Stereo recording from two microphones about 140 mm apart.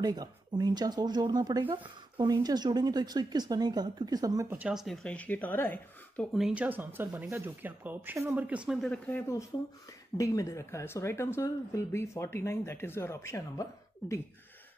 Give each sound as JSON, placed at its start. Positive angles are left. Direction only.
{"t": 0.0, "sound": "speech", "side_deg": -30}
{"t": 4.5, "sound": "speech", "side_deg": -10}
{"t": 6.3, "sound": "speech", "side_deg": -5}
{"t": 8.8, "sound": "speech", "side_deg": 5}
{"t": 10.1, "sound": "speech", "side_deg": 25}